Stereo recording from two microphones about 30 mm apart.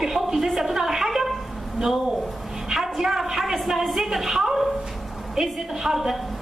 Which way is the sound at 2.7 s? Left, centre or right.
Centre.